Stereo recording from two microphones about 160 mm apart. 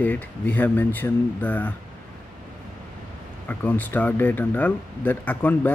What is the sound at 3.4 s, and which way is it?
Speech, 10° left (ahead or behind).